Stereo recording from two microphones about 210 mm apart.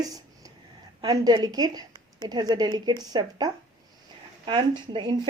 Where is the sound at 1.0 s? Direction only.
20° right (ahead or behind).